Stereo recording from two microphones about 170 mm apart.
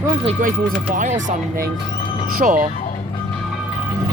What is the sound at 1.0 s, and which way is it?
Speech, 50° right (ahead or behind).